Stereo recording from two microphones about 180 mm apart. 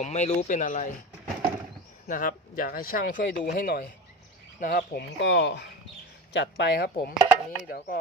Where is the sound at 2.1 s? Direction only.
50° left (ahead or behind).